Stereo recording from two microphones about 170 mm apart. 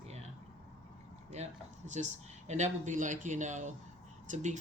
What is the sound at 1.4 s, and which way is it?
Speech, 40° right (ahead or behind).